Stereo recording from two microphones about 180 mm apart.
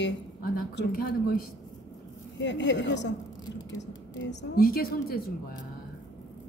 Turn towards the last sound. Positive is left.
turn(degrees=55)  # may be behind; listen again after turning